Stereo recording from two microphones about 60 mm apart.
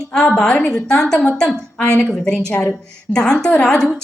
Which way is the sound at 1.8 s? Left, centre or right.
Centre.